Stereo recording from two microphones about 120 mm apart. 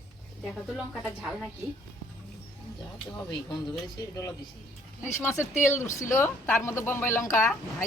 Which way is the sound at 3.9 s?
30° left (ahead or behind).